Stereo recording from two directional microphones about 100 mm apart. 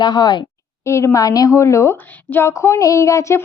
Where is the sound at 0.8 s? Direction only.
30° left (ahead or behind).